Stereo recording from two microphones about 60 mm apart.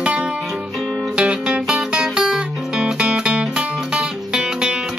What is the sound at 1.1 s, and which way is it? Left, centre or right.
Music, centre.